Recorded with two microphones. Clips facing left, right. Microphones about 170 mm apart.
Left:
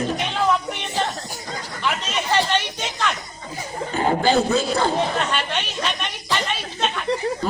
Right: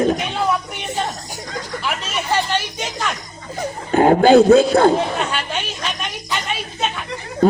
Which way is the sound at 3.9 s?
60° right (ahead or behind).